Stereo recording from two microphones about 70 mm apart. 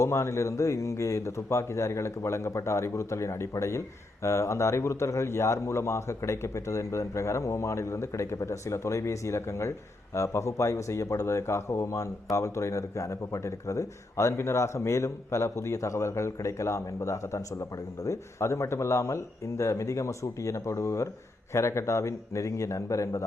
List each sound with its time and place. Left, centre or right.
0.0 s speech: left